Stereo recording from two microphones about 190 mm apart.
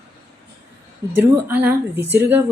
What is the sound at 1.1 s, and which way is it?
Speech, 10° right (ahead or behind).